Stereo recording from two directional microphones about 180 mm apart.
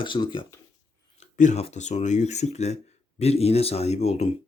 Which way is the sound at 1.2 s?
40° left (ahead or behind).